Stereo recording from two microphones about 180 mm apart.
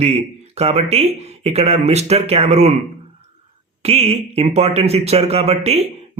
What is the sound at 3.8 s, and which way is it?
Speech, 35° right (ahead or behind).